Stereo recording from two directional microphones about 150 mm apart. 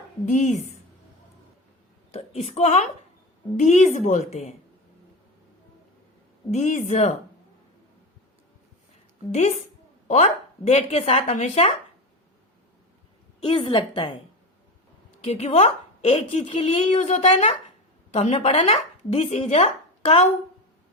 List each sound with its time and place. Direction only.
2.1 s a woman's voice: 45° left (ahead or behind)
6.5 s speech: 50° left (ahead or behind)
9.3 s speech: 50° left (ahead or behind)
13.4 s a woman's voice: 30° left (ahead or behind)
15.2 s a woman's voice: 40° left (ahead or behind)
16.9 s speech: 50° left (ahead or behind)